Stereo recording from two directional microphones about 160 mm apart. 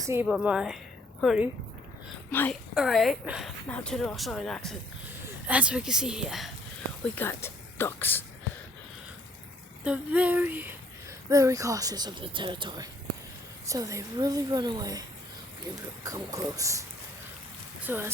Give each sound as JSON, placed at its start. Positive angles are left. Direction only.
{"t": 0.0, "sound": "a woman's voice", "side_deg": -15}
{"t": 0.3, "sound": "speech", "side_deg": -5}
{"t": 2.3, "sound": "a woman's voice", "side_deg": 10}
{"t": 2.7, "sound": "speech", "side_deg": 0}
{"t": 5.5, "sound": "speech", "side_deg": -10}
{"t": 7.0, "sound": "speech", "side_deg": 15}
{"t": 9.8, "sound": "speech", "side_deg": -10}
{"t": 16.0, "sound": "speech", "side_deg": -20}
{"t": 17.8, "sound": "speech", "side_deg": -10}